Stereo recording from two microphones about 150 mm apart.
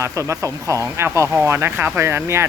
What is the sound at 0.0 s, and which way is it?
Speech, 20° right (ahead or behind).